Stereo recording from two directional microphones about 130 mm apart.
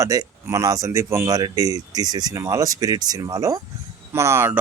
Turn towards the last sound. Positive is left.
turn(degrees=-15)  # may be behind; listen again after turning